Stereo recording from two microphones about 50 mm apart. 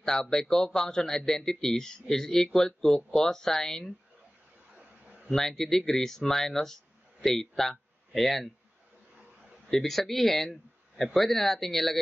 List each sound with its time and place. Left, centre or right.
0.0 s speech: centre
4.7 s a sound: right
5.3 s speech: centre
9.7 s speech: centre